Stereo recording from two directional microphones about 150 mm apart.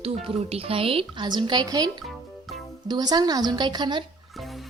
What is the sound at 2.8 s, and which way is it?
Music, 30° right (ahead or behind).